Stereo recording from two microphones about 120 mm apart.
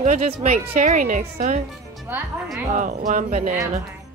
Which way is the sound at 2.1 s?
15° right (ahead or behind).